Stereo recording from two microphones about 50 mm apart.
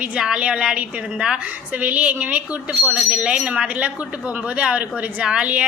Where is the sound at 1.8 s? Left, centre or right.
Right.